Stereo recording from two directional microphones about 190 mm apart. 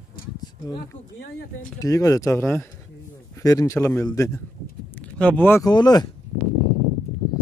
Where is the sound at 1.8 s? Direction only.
15° left (ahead or behind).